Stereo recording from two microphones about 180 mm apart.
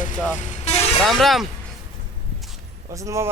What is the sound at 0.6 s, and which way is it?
Vehicle, 35° left (ahead or behind).